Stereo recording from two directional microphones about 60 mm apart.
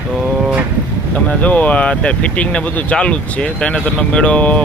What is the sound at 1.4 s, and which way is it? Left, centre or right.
Speech, left.